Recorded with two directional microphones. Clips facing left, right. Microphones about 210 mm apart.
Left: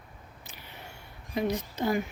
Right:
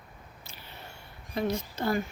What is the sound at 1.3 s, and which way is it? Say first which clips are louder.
Speech: left 1 dB; 15° left (ahead or behind).